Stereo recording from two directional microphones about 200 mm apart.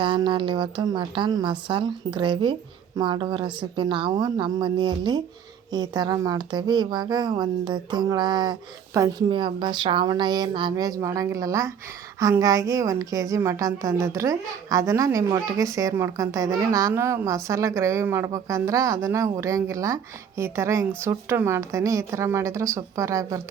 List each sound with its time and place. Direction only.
0.0 s a woman's voice: 25° right (ahead or behind)